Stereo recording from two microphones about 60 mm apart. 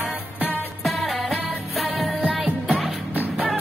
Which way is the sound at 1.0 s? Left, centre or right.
Centre.